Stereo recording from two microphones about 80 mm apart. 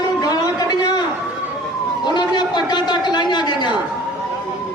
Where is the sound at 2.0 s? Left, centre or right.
Left.